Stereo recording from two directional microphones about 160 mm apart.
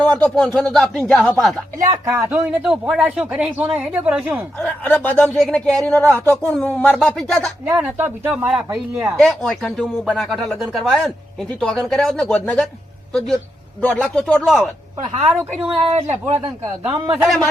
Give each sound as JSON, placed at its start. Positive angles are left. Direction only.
{"t": 0.0, "sound": "a woman's voice", "side_deg": 5}
{"t": 2.0, "sound": "speech", "side_deg": -20}
{"t": 2.6, "sound": "speech", "side_deg": -5}
{"t": 4.6, "sound": "a woman's voice", "side_deg": 10}
{"t": 7.9, "sound": "speech", "side_deg": -10}
{"t": 9.1, "sound": "a woman's voice", "side_deg": 5}
{"t": 15.6, "sound": "speech", "side_deg": -35}
{"t": 16.6, "sound": "speech", "side_deg": -10}
{"t": 17.2, "sound": "speech", "side_deg": 5}